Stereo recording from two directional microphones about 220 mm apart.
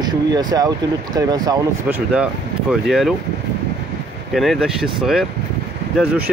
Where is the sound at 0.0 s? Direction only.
20° right (ahead or behind); by 3.2 s centre (ahead or behind).